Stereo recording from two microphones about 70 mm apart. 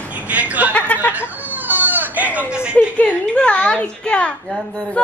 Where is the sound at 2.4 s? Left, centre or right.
Centre.